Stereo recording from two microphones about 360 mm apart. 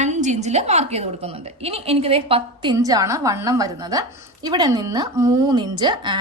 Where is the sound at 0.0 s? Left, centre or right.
Centre.